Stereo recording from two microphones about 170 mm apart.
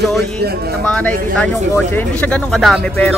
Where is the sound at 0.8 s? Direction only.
10° left (ahead or behind).